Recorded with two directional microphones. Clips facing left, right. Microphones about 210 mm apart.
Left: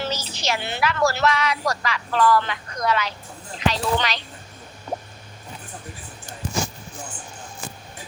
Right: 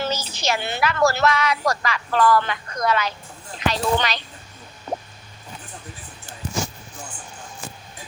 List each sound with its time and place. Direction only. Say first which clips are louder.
0.0 s a woman's voice: right 2 dB; 50° right (ahead or behind)